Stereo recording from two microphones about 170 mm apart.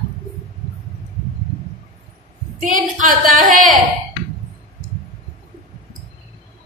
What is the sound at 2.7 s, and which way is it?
Speech, 50° right (ahead or behind).